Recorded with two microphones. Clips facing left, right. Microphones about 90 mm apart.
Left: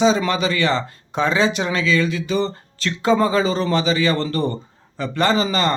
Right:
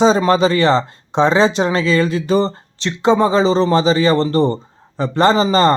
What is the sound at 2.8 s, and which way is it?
Speech, 25° right (ahead or behind).